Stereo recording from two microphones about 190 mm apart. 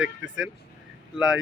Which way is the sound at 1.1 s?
5° right (ahead or behind).